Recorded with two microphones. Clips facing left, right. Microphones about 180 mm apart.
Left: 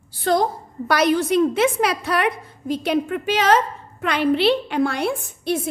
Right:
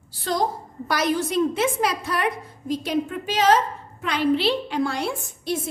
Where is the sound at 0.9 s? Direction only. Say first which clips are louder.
Left 5 dB; 65° left (ahead or behind).